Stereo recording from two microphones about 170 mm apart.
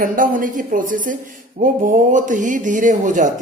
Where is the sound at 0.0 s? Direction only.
50° right (ahead or behind).